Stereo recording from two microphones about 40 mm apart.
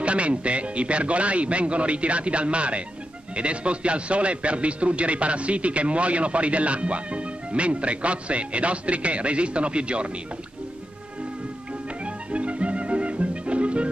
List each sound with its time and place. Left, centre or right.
0.0 s a man's voice: right
12.0 s music: right